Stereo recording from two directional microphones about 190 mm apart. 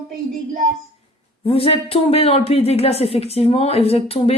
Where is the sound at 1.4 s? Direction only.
30° left (ahead or behind).